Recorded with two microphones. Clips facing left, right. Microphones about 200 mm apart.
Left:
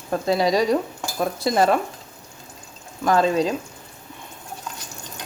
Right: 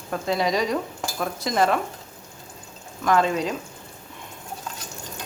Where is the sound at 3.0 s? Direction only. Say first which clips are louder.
Left 3 dB; 35° left (ahead or behind).